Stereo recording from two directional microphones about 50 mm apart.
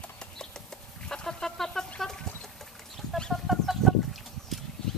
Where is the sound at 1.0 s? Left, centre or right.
Centre.